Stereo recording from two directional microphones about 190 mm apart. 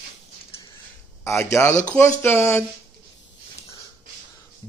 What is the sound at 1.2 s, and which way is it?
Music, 15° left (ahead or behind).